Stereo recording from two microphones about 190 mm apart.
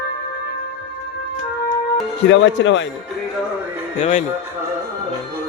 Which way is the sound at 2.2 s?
70° left (ahead or behind).